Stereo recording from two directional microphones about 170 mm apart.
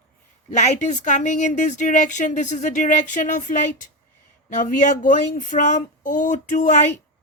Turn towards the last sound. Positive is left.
turn(degrees=45)  # may be behind; listen again after turning